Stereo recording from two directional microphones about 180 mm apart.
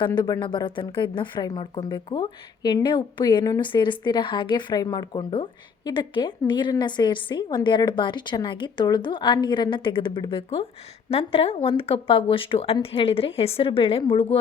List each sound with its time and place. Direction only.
0.0 s speech: 25° left (ahead or behind)